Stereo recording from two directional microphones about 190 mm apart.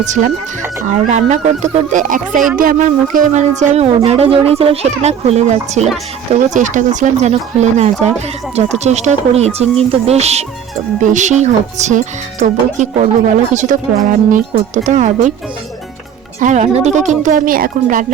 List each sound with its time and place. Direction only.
0.0 s speech: 40° right (ahead or behind)
16.4 s speech: 40° right (ahead or behind)